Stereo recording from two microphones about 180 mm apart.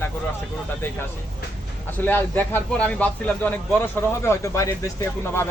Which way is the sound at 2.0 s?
10° left (ahead or behind).